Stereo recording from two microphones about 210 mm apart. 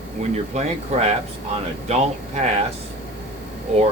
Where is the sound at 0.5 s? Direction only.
30° right (ahead or behind).